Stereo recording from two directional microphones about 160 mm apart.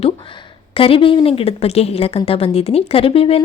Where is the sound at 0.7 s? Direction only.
35° left (ahead or behind).